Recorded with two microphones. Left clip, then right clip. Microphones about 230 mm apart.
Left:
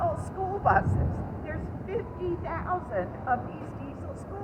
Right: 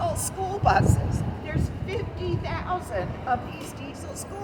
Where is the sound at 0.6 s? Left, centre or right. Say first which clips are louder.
Right 2 dB; right.